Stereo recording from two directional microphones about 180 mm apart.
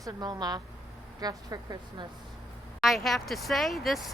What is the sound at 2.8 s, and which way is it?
Speech, centre (ahead or behind).